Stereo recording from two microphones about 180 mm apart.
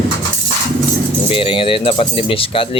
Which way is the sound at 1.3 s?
30° left (ahead or behind).